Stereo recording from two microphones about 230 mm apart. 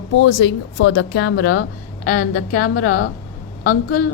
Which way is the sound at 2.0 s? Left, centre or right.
Left.